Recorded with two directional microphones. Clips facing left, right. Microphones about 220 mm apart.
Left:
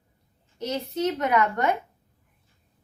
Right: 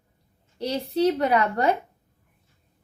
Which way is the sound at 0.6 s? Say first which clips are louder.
Right 4 dB; 35° right (ahead or behind).